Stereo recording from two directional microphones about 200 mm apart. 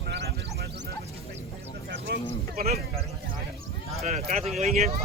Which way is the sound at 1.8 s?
55° right (ahead or behind).